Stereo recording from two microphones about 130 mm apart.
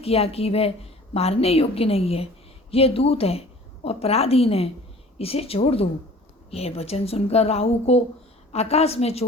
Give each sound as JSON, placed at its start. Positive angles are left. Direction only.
{"t": 0.0, "sound": "a woman's voice", "side_deg": 50}